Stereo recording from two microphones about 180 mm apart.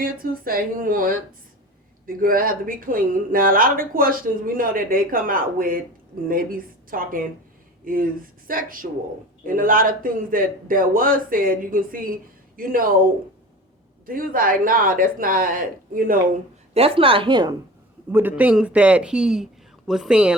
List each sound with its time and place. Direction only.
0.0 s speech: 55° right (ahead or behind)
6.9 s speech: 50° right (ahead or behind)
14.1 s speech: 50° right (ahead or behind)
16.7 s speech: 30° right (ahead or behind)
18.1 s a man's voice: 10° right (ahead or behind)